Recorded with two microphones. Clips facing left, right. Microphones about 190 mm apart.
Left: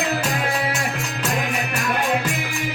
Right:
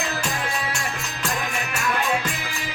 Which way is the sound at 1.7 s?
55° left (ahead or behind).